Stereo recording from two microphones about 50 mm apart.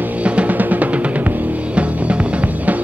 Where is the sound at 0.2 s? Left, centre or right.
Right.